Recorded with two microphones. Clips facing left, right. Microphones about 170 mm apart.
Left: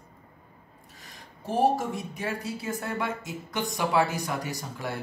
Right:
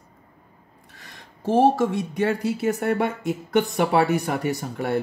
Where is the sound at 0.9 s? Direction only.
80° right.